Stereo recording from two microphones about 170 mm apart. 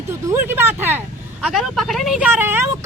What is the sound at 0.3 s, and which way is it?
Speech, 15° right (ahead or behind).